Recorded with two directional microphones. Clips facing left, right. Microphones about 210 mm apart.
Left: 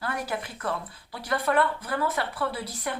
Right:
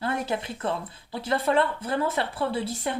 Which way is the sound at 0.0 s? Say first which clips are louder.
Right 3 dB; 25° right (ahead or behind).